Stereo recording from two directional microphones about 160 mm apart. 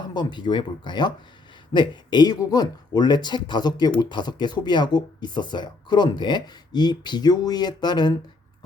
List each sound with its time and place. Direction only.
0.0 s speech: 30° left (ahead or behind)